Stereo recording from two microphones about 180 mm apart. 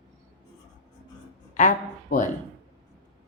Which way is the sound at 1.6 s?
45° left (ahead or behind).